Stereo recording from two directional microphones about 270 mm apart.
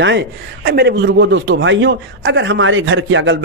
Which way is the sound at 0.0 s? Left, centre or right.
Right.